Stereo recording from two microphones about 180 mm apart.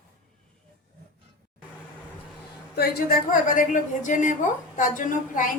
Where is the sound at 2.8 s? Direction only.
60° left (ahead or behind).